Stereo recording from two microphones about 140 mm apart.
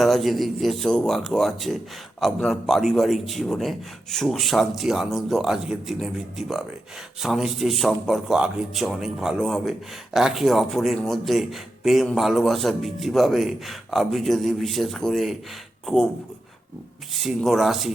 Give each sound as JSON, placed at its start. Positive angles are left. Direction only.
{"t": 0.0, "sound": "a man's voice", "side_deg": 0}
{"t": 17.2, "sound": "a man's voice", "side_deg": 0}